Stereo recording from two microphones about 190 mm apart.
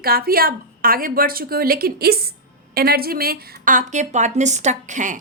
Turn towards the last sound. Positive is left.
turn(degrees=-40)  # may be behind; listen again after turning